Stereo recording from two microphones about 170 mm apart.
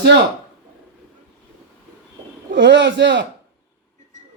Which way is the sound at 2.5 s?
90° right.